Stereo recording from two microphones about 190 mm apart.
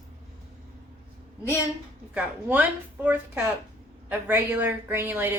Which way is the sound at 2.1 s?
10° right (ahead or behind).